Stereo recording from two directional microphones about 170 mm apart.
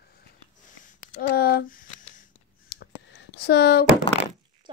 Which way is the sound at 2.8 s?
80° left.